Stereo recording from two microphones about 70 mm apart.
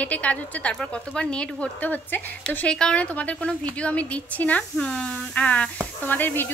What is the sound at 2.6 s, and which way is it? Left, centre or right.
A woman's voice, centre.